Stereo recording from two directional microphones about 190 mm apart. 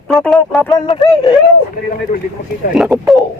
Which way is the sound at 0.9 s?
25° left (ahead or behind).